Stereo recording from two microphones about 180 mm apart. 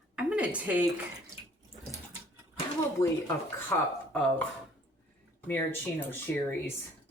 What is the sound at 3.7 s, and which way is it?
Speech, 10° left (ahead or behind).